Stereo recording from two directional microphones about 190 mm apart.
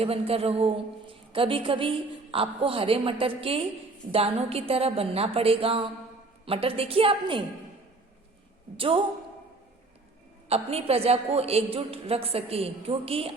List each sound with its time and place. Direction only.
0.0 s a woman's voice: 30° right (ahead or behind)
8.7 s a woman's voice: 25° right (ahead or behind)
10.5 s a woman's voice: 30° right (ahead or behind)